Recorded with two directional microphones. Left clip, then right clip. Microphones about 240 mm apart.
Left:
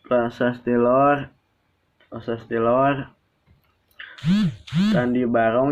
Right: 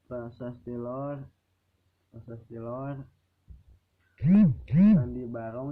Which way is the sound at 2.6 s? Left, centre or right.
Centre.